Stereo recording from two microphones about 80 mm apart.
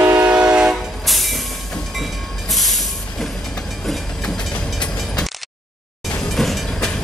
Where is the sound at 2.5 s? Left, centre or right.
Centre.